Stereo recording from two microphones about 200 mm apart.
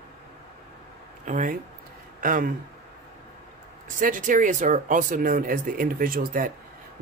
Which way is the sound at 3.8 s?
40° right (ahead or behind).